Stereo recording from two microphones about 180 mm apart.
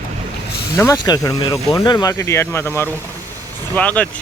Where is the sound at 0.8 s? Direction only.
20° left (ahead or behind).